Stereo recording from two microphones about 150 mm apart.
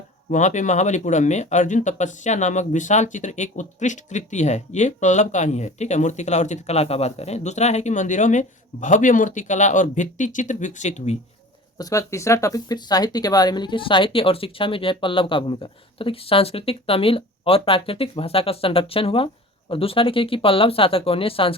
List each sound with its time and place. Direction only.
0.3 s speech: 55° left (ahead or behind)
11.8 s speech: 20° left (ahead or behind)